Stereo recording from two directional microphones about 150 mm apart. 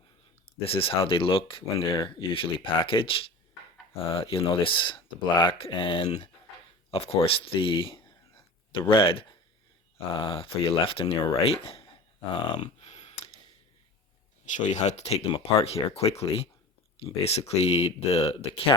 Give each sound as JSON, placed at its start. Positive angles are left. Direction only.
{"t": 0.6, "sound": "speech", "side_deg": 40}
{"t": 12.3, "sound": "a sound", "side_deg": 40}
{"t": 14.4, "sound": "speech", "side_deg": 55}